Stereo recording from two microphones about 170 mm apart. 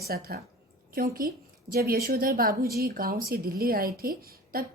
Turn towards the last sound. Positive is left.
turn(degrees=-60)  # may be behind; listen again after turning